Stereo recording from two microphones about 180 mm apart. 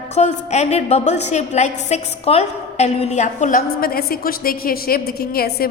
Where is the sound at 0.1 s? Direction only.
40° left (ahead or behind).